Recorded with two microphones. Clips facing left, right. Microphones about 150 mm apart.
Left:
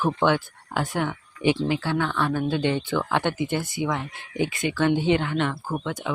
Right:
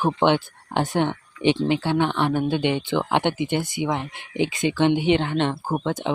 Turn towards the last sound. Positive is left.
turn(degrees=-25)  # may be behind; listen again after turning